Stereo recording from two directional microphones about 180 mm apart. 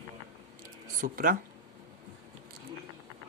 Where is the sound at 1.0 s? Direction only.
50° right (ahead or behind).